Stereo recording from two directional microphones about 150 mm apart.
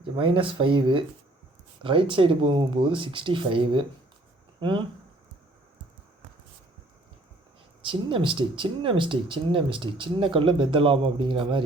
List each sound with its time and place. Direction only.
0.2 s speech: 35° right (ahead or behind)
7.9 s speech: 35° right (ahead or behind)